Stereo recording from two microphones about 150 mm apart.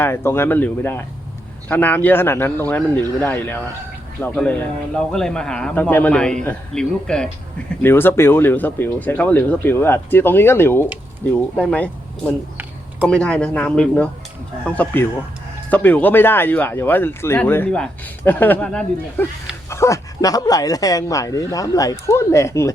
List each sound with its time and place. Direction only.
0.0 s a man's voice: 15° left (ahead or behind)
15.7 s speech: 10° left (ahead or behind)
19.7 s speech: 20° left (ahead or behind)